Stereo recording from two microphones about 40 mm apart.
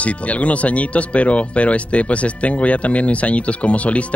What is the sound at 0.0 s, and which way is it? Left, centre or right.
Speech, left.